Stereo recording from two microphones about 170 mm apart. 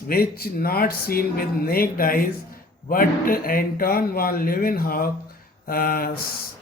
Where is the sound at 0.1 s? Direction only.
60° left (ahead or behind).